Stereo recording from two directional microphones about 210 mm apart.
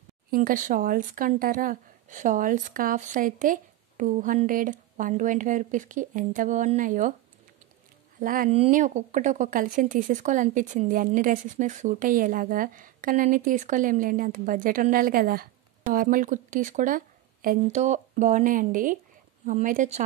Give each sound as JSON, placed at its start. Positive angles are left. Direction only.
{"t": 0.3, "sound": "speech", "side_deg": -40}
{"t": 8.2, "sound": "speech", "side_deg": -40}